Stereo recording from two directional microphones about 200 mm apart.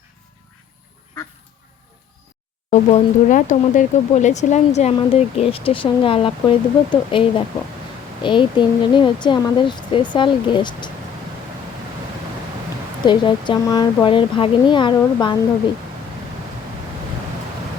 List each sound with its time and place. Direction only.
2.6 s speech: 40° left (ahead or behind); by 10.9 s 20° left (ahead or behind)
13.1 s speech: 25° left (ahead or behind)